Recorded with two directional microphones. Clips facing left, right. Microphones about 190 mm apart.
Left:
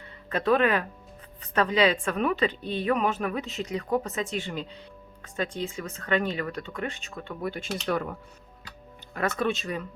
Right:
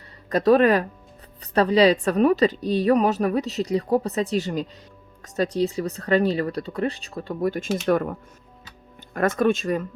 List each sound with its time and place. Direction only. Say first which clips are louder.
0.3 s a woman's voice: right 6 dB; 40° right (ahead or behind)
9.1 s speech: right 7 dB; 50° right (ahead or behind)